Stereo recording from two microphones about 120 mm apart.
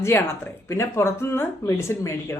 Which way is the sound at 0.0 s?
20° left (ahead or behind).